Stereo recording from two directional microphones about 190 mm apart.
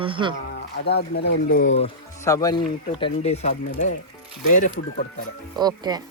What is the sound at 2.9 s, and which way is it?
Speech, 30° left (ahead or behind).